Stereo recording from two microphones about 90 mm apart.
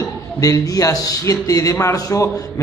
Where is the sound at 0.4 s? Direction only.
40° left (ahead or behind).